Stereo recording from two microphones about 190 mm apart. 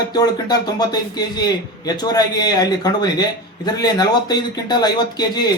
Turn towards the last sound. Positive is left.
turn(degrees=20)  # may be behind; listen again after turning